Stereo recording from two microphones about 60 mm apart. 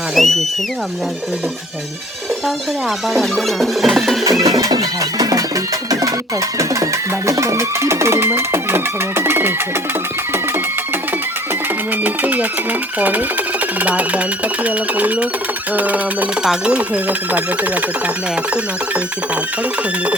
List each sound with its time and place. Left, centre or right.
0.2 s music: centre
3.1 s music: centre
4.2 s music: right
7.3 s speech: right
12.0 s speech: right
16.4 s speech: centre
16.7 s speech: right